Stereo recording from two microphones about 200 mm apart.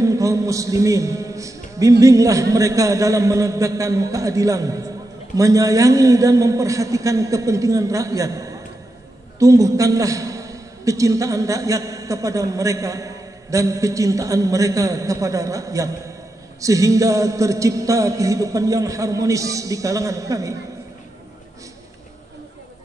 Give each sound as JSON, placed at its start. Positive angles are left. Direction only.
{"t": 0.0, "sound": "a man's voice", "side_deg": -15}